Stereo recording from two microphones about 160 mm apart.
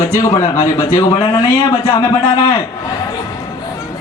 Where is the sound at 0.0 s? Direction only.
20° left (ahead or behind).